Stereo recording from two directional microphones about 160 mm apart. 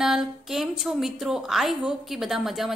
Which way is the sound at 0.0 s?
Centre (ahead or behind).